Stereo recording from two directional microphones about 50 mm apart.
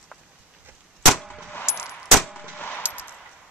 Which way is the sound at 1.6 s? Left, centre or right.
Left.